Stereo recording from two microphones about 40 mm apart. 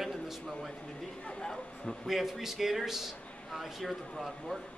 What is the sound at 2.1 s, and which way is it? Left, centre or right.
A man's voice, centre.